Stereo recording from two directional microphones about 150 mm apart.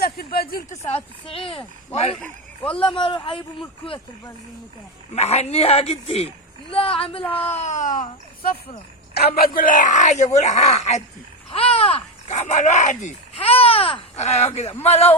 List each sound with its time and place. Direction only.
0.0 s speech: 90° left
0.9 s speech: 40° left (ahead or behind)
5.1 s speech: 45° left (ahead or behind)
7.3 s speech: 10° left (ahead or behind)
7.5 s speech: 50° left (ahead or behind)
9.1 s a man's voice: 85° left
9.6 s speech: 65° left (ahead or behind)
13.3 s speech: 40° left (ahead or behind)